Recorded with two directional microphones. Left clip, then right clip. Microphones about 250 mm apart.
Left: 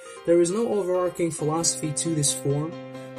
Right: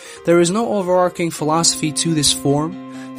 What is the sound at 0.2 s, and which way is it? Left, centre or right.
A man's voice, right.